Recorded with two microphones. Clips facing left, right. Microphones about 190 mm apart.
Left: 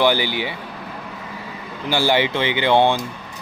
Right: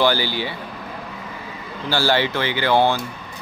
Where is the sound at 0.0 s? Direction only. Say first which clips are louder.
Left 1 dB; 15° left (ahead or behind).